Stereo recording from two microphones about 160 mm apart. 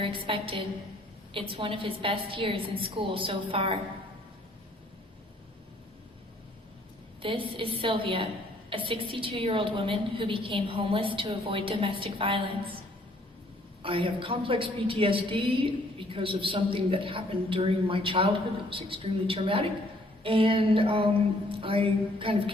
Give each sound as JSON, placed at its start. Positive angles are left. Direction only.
{"t": 0.0, "sound": "a woman's voice", "side_deg": -35}
{"t": 7.2, "sound": "a woman's voice", "side_deg": -35}
{"t": 13.8, "sound": "a woman's voice", "side_deg": -35}